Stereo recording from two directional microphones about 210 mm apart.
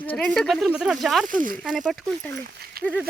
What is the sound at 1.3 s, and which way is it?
Speech, 40° right (ahead or behind).